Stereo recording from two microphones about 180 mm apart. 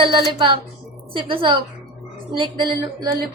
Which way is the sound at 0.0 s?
30° right (ahead or behind).